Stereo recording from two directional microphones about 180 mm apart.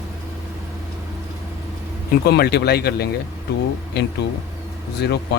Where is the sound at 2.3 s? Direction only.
60° left (ahead or behind).